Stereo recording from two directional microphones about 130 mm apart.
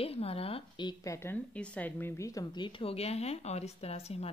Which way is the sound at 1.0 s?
20° left (ahead or behind).